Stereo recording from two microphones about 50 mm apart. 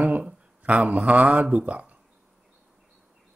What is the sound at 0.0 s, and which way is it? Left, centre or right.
Speech, right.